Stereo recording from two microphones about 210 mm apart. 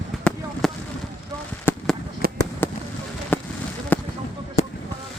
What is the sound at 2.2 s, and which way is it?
Fireworks, 45° right (ahead or behind).